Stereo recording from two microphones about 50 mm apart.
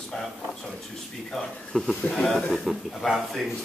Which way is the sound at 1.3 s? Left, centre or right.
Centre.